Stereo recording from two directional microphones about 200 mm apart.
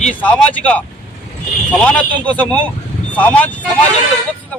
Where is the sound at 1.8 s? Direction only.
5° left (ahead or behind).